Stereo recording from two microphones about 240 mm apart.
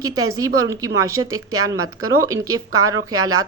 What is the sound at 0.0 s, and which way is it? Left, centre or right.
Speech, centre.